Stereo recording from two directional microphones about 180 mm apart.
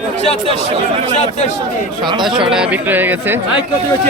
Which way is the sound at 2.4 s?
5° right (ahead or behind).